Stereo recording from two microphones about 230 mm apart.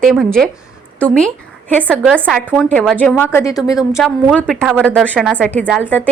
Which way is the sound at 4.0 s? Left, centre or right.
Centre.